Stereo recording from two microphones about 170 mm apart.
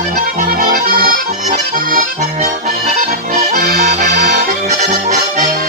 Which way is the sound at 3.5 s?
65° right (ahead or behind).